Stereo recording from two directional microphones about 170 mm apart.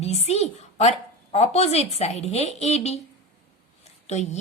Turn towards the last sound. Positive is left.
turn(degrees=40)  # may be behind; listen again after turning